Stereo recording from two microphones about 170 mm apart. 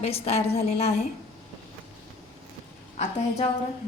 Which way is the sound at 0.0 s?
35° left (ahead or behind).